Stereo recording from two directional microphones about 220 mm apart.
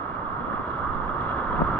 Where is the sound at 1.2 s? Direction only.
5° left (ahead or behind).